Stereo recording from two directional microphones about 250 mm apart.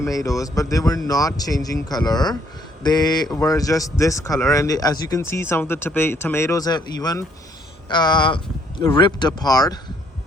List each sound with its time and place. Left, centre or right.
0.0 s a man's voice: centre